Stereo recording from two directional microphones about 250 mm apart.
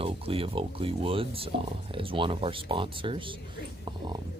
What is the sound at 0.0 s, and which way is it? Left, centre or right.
Speech, right.